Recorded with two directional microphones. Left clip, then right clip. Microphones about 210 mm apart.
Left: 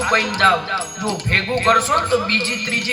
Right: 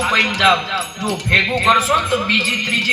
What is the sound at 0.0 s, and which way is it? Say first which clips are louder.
Speech: right 1 dB; 30° left (ahead or behind).